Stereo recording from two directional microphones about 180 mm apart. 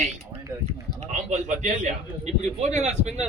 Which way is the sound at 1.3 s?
45° right (ahead or behind).